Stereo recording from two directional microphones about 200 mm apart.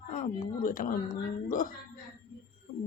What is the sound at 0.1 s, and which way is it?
Speech, 40° left (ahead or behind).